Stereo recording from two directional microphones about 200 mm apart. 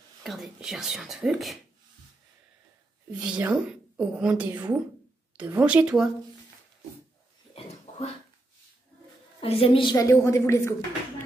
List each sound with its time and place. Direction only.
0.2 s speech: centre (ahead or behind)
3.2 s speech: 5° right (ahead or behind)
7.5 s a sound: 35° left (ahead or behind)
9.4 s a woman's voice: 30° left (ahead or behind)